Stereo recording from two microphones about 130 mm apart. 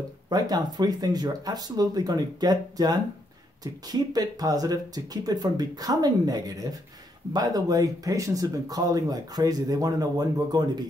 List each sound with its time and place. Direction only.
0.3 s speech: 30° right (ahead or behind)